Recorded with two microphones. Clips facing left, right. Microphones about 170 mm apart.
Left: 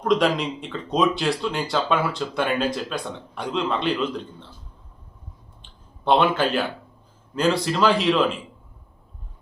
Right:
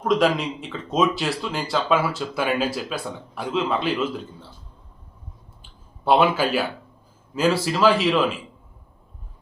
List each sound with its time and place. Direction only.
0.0 s speech: centre (ahead or behind)
5.6 s a sound: 5° right (ahead or behind)
7.3 s speech: 5° right (ahead or behind)